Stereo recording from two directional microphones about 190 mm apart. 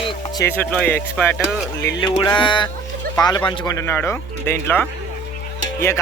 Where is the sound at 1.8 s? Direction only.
20° left (ahead or behind).